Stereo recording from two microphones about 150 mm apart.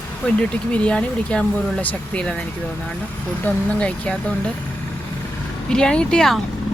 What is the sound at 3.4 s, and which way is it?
Speech, 10° left (ahead or behind).